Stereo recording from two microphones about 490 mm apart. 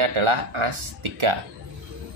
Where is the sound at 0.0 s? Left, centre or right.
Right.